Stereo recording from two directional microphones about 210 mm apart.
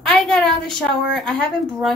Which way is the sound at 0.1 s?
Centre (ahead or behind).